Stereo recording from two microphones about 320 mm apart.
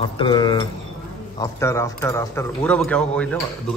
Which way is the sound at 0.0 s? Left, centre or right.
Centre.